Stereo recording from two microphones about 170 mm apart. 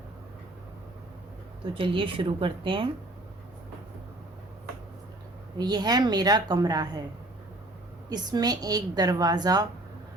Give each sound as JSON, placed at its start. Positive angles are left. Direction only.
{"t": 1.7, "sound": "speech", "side_deg": -30}
{"t": 5.5, "sound": "a woman's voice", "side_deg": -25}
{"t": 8.1, "sound": "a woman's voice", "side_deg": -25}